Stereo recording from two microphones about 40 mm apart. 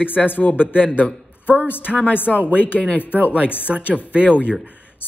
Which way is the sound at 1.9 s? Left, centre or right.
Centre.